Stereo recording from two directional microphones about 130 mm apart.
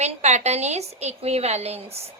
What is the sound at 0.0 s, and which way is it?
A woman's voice, 60° right (ahead or behind).